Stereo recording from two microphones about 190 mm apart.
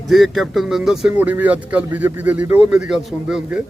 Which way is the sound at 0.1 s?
Centre (ahead or behind).